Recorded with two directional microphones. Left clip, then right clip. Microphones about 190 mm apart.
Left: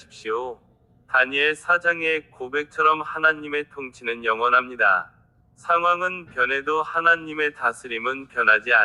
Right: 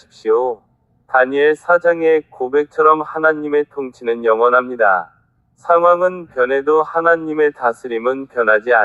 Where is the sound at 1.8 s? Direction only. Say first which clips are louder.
Right 9 dB; 20° left (ahead or behind).